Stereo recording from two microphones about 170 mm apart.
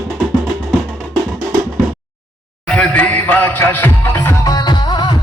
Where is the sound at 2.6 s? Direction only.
5° left (ahead or behind).